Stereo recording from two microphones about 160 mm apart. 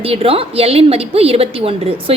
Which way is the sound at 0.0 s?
35° right (ahead or behind).